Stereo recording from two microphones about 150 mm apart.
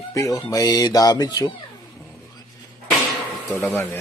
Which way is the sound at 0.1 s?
25° left (ahead or behind).